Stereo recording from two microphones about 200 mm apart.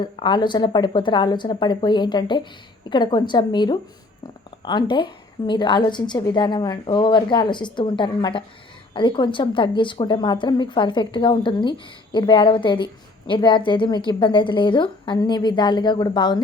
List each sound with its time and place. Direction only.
0.0 s a woman's voice: 25° left (ahead or behind)